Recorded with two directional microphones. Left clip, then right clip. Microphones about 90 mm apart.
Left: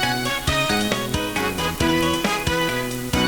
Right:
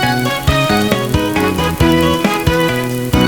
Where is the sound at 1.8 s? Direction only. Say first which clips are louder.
Right 7 dB; 35° left (ahead or behind).